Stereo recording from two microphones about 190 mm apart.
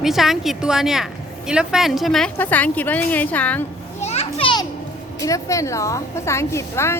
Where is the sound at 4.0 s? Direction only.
30° left (ahead or behind).